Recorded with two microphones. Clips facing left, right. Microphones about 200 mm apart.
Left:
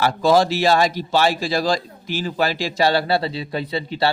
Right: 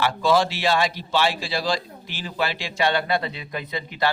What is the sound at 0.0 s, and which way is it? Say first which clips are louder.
Speech: left 4 dB; 40° left (ahead or behind).